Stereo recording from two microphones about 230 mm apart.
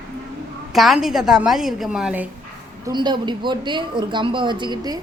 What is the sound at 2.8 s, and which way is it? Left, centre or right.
Speech, centre.